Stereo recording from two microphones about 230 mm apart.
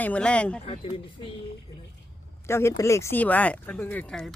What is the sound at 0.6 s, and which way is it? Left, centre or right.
Speech, left.